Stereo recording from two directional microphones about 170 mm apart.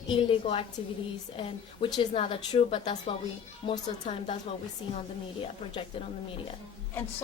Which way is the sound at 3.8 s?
45° left (ahead or behind).